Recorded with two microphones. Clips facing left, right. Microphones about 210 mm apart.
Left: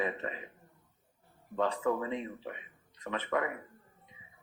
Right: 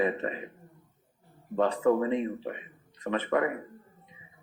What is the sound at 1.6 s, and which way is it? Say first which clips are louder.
Speech: right 6 dB; 55° right (ahead or behind).